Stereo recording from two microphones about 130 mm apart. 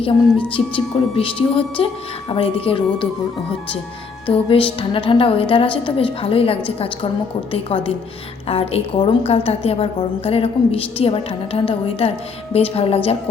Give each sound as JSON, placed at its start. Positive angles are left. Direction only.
{"t": 0.0, "sound": "a woman's voice", "side_deg": 45}
{"t": 4.3, "sound": "a woman's voice", "side_deg": 45}